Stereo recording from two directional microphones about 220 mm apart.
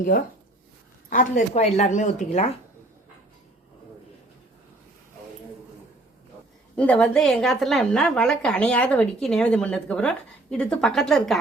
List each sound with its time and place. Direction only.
1.1 s speech: 35° left (ahead or behind)
6.7 s a woman's voice: 5° left (ahead or behind)